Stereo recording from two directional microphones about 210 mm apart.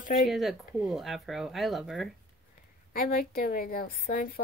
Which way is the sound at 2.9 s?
45° left (ahead or behind).